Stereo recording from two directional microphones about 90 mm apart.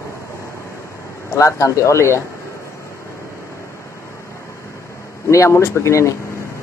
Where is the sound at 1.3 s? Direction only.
35° left (ahead or behind).